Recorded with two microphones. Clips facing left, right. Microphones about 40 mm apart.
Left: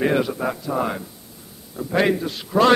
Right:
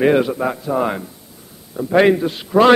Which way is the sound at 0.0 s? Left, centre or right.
Centre.